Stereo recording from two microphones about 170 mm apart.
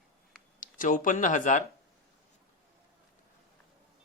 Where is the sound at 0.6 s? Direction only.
50° left (ahead or behind).